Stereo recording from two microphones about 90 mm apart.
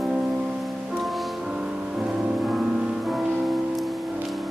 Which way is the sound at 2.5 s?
5° right (ahead or behind).